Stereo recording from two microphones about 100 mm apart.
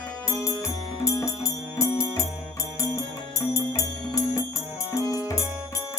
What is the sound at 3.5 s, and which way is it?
Music, 30° left (ahead or behind).